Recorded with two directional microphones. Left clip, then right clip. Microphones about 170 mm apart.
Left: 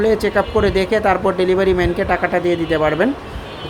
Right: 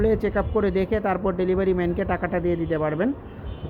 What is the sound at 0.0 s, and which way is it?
Speech, 10° left (ahead or behind).